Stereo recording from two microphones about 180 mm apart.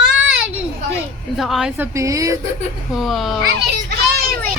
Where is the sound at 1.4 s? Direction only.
Centre (ahead or behind).